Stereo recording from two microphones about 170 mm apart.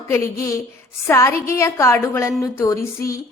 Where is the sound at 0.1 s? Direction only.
20° left (ahead or behind).